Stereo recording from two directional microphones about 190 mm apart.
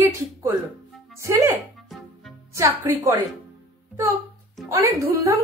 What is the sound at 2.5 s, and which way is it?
Speech, 15° right (ahead or behind).